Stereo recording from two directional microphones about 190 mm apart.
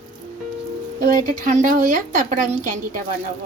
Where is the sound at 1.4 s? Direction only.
40° right (ahead or behind).